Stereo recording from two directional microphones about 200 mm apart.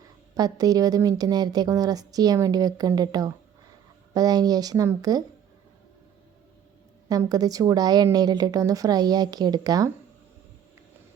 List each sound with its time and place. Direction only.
0.3 s a woman's voice: 20° right (ahead or behind)
7.1 s a woman's voice: 20° right (ahead or behind)